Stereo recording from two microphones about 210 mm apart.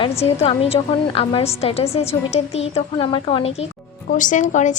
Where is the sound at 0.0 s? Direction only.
30° left (ahead or behind).